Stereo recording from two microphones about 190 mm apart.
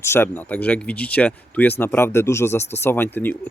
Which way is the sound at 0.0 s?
10° left (ahead or behind).